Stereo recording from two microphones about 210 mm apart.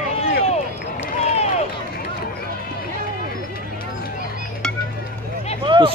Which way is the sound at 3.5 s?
45° left (ahead or behind).